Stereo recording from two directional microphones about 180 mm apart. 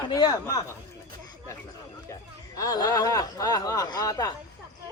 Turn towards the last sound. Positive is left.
turn(degrees=20)  # may be behind; listen again after turning